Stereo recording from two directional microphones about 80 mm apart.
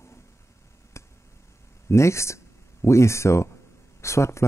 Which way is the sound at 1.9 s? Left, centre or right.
Left.